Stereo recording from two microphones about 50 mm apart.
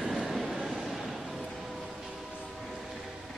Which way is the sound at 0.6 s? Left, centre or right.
Centre.